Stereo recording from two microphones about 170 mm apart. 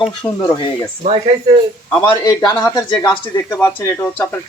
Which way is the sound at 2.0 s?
20° left (ahead or behind).